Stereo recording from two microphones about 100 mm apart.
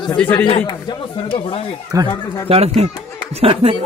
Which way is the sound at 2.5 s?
70° right (ahead or behind).